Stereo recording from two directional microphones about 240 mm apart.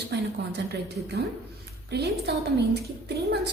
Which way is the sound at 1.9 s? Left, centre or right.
Right.